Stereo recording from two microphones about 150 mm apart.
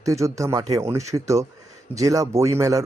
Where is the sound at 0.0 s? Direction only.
20° right (ahead or behind).